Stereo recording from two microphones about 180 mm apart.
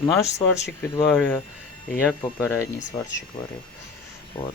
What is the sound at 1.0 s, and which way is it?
Speech, 5° left (ahead or behind).